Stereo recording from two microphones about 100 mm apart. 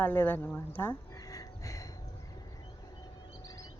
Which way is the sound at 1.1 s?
35° left (ahead or behind).